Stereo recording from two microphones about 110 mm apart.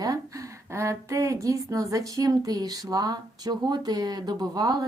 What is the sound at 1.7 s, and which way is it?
Speech, 30° right (ahead or behind).